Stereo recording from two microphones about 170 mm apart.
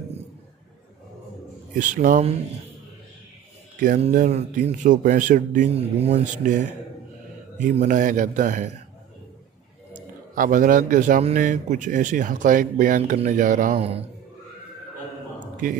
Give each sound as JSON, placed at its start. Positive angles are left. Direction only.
{"t": 1.8, "sound": "a man's voice", "side_deg": -50}
{"t": 3.8, "sound": "a man's voice", "side_deg": -50}
{"t": 9.9, "sound": "a man's voice", "side_deg": -55}
{"t": 13.7, "sound": "a man's voice", "side_deg": -35}
{"t": 15.5, "sound": "a sound", "side_deg": -55}